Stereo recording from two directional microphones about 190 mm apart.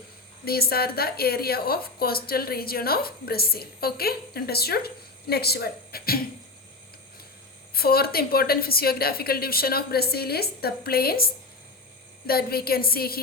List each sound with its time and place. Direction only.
0.4 s a woman's voice: 55° left (ahead or behind)
7.7 s a woman's voice: 55° left (ahead or behind)